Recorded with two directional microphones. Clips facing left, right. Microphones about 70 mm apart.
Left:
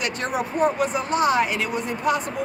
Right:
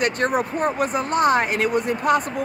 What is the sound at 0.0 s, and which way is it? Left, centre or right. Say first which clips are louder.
Speech: right 5 dB; right.